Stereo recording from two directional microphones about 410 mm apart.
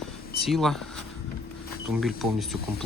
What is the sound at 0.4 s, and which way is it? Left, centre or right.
Snake, centre.